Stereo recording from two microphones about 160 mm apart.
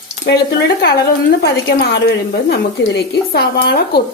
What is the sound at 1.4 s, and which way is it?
A woman's voice, 85° left.